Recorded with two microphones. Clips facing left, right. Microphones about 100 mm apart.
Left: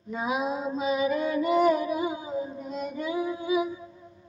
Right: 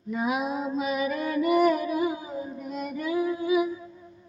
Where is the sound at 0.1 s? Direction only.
25° left (ahead or behind).